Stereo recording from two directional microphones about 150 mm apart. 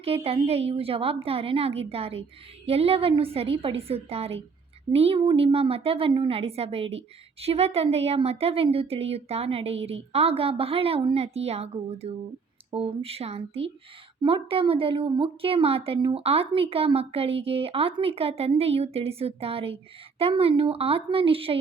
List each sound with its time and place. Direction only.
0.0 s a woman's voice: 40° right (ahead or behind)